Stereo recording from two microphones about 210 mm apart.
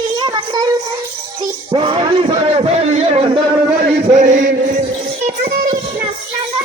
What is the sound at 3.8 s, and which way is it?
Chant, 35° right (ahead or behind).